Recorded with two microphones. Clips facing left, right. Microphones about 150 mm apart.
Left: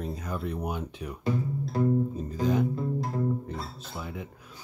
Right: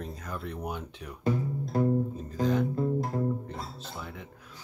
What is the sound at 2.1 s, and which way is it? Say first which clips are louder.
Music: left 1 dB; 10° left (ahead or behind).